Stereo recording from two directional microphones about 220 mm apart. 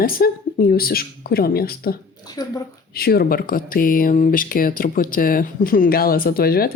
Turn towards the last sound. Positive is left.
turn(degrees=45)  # may be behind; listen again after turning